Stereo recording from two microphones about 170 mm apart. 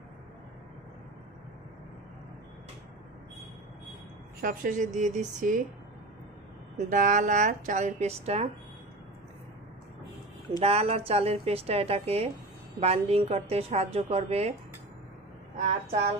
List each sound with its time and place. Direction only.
4.4 s a woman's voice: 55° right (ahead or behind)
6.8 s a woman's voice: 50° right (ahead or behind)
10.6 s a woman's voice: 35° right (ahead or behind)
15.5 s speech: 45° right (ahead or behind)